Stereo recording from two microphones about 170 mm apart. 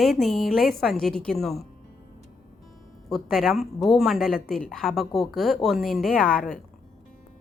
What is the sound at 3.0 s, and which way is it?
A woman's voice, centre (ahead or behind).